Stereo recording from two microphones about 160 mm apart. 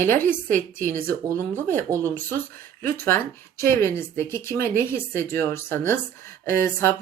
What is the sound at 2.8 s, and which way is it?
Speech, 15° left (ahead or behind).